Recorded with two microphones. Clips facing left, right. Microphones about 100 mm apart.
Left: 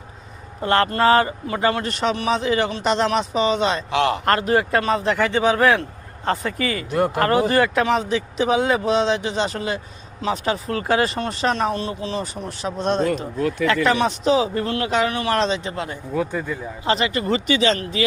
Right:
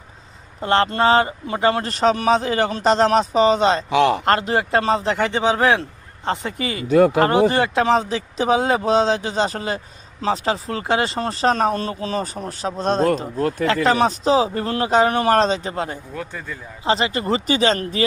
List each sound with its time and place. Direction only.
0.6 s speech: 25° right (ahead or behind)
16.1 s speech: 10° left (ahead or behind)
16.8 s speech: 30° right (ahead or behind)